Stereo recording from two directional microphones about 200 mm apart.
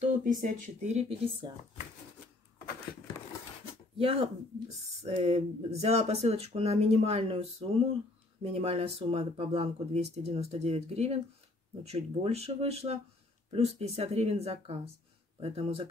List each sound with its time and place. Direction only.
0.2 s speech: 40° right (ahead or behind)
4.0 s speech: 25° right (ahead or behind)